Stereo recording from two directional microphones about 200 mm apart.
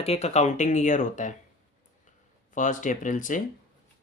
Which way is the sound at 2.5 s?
40° left (ahead or behind).